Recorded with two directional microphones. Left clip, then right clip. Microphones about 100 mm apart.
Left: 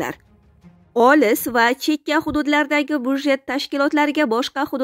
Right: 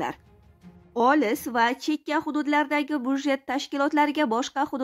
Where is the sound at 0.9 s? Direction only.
70° left (ahead or behind); by 4.8 s 35° left (ahead or behind).